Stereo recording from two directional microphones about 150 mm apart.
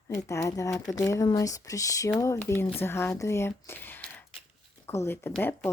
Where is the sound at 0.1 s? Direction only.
20° left (ahead or behind).